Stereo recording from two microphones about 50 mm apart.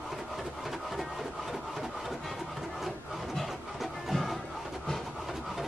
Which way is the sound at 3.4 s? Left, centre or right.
Centre.